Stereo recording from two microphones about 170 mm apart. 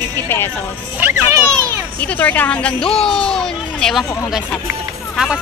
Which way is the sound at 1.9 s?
10° left (ahead or behind).